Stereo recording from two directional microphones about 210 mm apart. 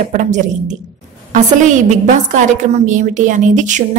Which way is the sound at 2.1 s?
35° right (ahead or behind).